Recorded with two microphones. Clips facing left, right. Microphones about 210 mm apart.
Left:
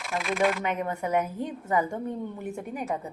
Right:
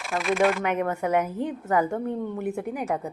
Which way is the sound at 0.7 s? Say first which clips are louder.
Right 3 dB; 60° right (ahead or behind).